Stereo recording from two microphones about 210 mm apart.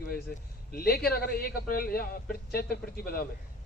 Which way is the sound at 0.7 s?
45° left (ahead or behind).